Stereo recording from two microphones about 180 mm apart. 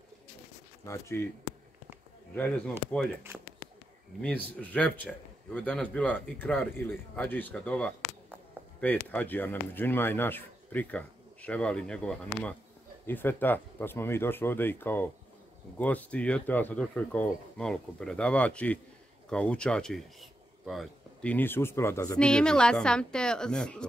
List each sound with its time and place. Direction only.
0.8 s speech: 15° left (ahead or behind)
2.3 s speech: 10° left (ahead or behind)
4.2 s speech: 10° left (ahead or behind)
22.2 s a woman's voice: 5° left (ahead or behind)